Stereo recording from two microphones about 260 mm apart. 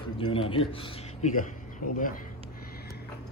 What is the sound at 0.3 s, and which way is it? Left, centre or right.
Speech, left.